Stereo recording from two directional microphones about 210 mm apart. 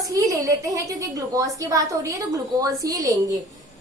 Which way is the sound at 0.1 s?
15° right (ahead or behind).